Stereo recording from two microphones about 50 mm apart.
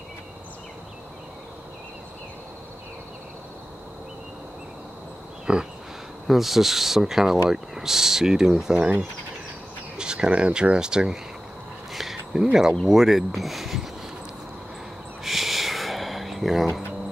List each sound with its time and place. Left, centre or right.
5.5 s speech: centre
6.2 s speech: centre
9.9 s speech: centre
11.9 s a sound: centre
12.8 s speech: centre
15.2 s a sound: centre